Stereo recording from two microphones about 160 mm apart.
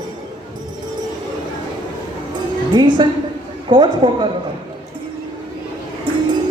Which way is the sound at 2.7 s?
30° right (ahead or behind).